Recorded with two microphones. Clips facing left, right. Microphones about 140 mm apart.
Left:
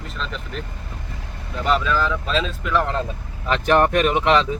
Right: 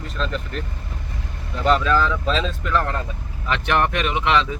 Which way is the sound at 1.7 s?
Centre (ahead or behind).